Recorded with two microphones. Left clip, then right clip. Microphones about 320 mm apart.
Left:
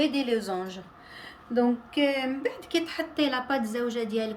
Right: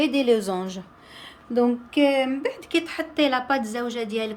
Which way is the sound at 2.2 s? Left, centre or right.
Centre.